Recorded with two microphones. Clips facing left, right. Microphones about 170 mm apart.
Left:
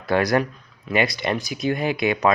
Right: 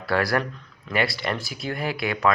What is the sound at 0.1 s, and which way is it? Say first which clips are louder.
Speech: left 4 dB; 20° left (ahead or behind).